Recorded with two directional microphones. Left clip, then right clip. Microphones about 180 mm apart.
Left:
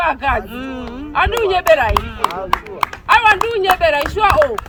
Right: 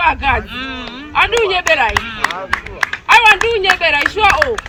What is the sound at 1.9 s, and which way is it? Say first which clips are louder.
Speech: right 1 dB; 55° left (ahead or behind).